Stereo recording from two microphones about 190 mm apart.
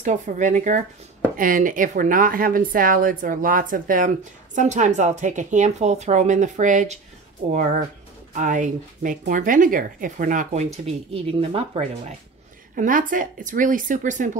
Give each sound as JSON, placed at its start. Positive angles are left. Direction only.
{"t": 0.0, "sound": "a woman's voice", "side_deg": -40}
{"t": 8.4, "sound": "a woman's voice", "side_deg": -40}
{"t": 12.7, "sound": "speech", "side_deg": -45}